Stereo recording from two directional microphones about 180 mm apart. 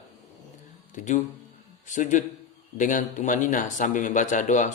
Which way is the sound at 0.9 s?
45° left (ahead or behind).